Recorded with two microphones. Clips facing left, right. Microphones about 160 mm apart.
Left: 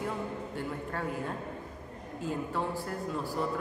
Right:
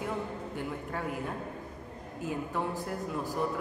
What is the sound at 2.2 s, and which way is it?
A woman's voice, 15° right (ahead or behind).